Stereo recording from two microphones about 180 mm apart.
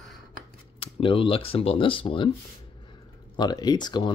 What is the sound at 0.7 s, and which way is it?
Speech, 30° left (ahead or behind).